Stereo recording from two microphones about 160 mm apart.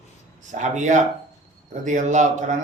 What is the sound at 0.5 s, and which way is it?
A man's voice, 50° right (ahead or behind).